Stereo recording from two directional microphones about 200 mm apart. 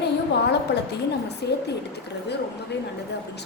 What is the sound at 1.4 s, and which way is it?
Speech, 55° left (ahead or behind).